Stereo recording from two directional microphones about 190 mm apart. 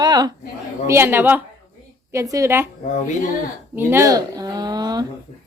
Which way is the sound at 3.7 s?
15° right (ahead or behind).